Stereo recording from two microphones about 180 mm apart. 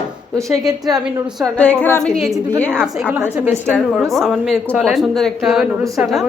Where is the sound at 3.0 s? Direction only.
10° right (ahead or behind).